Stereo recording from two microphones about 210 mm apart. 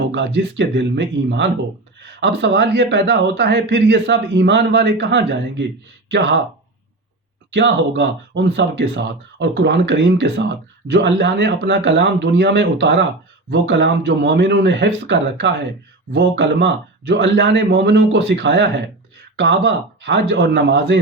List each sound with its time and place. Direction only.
0.1 s a man's voice: 55° right (ahead or behind)
7.5 s a man's voice: 55° right (ahead or behind)